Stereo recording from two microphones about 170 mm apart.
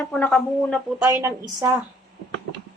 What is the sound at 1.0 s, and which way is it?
Speech, 15° right (ahead or behind).